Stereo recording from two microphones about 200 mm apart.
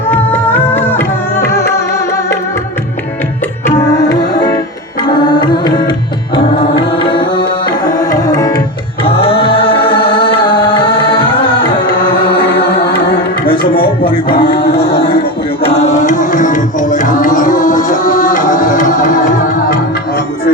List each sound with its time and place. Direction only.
0.1 s music: 10° left (ahead or behind)
5.0 s carnatic music: 20° left (ahead or behind)
6.3 s music: 25° left (ahead or behind)
9.0 s music: 30° left (ahead or behind)
13.4 s music: 25° left (ahead or behind)
15.6 s tabla: 30° left (ahead or behind)